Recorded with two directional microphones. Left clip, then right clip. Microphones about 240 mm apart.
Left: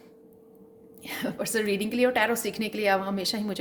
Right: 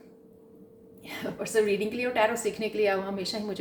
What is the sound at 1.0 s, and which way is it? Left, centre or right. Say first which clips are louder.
A woman's voice: left 3 dB; left.